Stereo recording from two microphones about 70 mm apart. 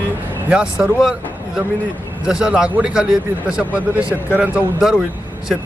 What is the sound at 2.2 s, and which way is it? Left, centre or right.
A man's voice, centre.